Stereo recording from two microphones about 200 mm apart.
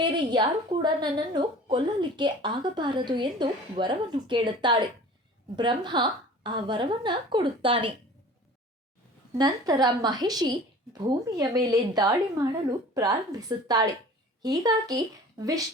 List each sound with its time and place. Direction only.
0.0 s a woman's voice: 20° right (ahead or behind)
9.4 s a woman's voice: 20° right (ahead or behind)